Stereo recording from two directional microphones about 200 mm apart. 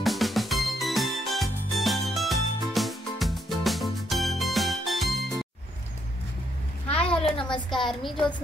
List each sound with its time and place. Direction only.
0.0 s music: centre (ahead or behind)
6.9 s a sound: 30° left (ahead or behind)
7.7 s a woman's voice: centre (ahead or behind)